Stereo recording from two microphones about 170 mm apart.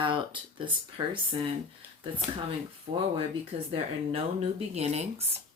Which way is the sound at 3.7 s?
35° right (ahead or behind).